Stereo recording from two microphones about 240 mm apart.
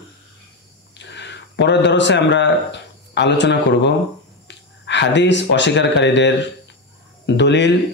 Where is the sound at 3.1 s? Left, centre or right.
Left.